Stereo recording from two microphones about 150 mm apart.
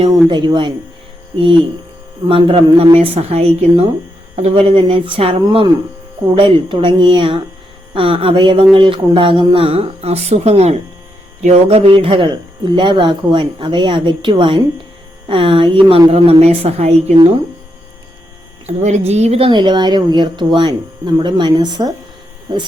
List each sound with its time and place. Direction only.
0.3 s speech: 30° right (ahead or behind)
2.2 s speech: 40° right (ahead or behind)
18.6 s speech: 50° right (ahead or behind); by 21.9 s 30° right (ahead or behind)